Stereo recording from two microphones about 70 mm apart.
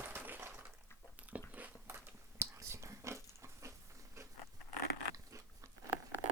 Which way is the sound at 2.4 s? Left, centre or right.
Right.